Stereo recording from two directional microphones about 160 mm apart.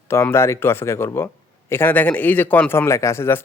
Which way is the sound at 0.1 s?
15° left (ahead or behind).